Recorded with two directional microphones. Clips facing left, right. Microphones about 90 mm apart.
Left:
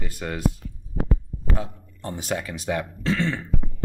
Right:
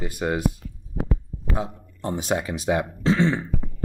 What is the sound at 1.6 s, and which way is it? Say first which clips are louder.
Speech: right 3 dB; 20° right (ahead or behind).